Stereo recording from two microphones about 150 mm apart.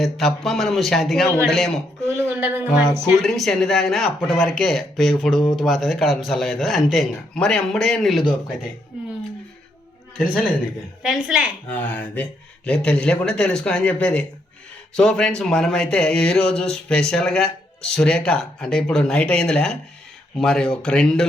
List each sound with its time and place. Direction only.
0.0 s speech: centre (ahead or behind)
2.0 s speech: 15° right (ahead or behind)
2.6 s speech: 5° left (ahead or behind)
10.2 s speech: 10° left (ahead or behind)
11.0 s speech: 5° right (ahead or behind)
11.7 s speech: 10° left (ahead or behind)